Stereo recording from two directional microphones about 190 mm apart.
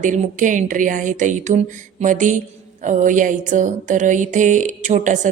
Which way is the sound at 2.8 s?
40° right (ahead or behind).